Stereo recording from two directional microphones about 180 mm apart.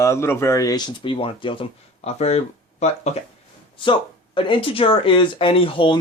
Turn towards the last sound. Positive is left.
turn(degrees=30)  # may be behind; listen again after turning